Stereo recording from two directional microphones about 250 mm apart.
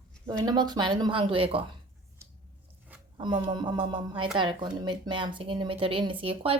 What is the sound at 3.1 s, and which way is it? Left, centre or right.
Speech, centre.